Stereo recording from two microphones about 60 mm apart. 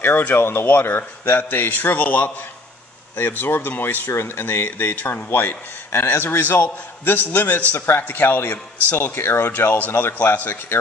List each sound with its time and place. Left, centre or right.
0.0 s speech: left
9.9 s speech: left